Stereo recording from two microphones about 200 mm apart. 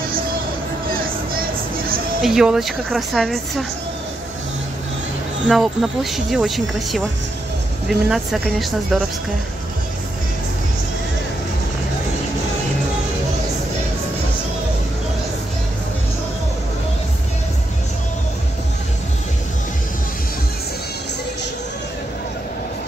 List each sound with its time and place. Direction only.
0.9 s vehicle: 45° right (ahead or behind)
2.2 s speech: centre (ahead or behind)
5.5 s speech: centre (ahead or behind)